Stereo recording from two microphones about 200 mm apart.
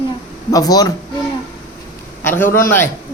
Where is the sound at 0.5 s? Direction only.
20° left (ahead or behind).